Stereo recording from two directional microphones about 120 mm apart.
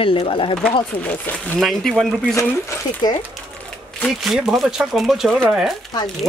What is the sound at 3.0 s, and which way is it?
Speech, 35° left (ahead or behind).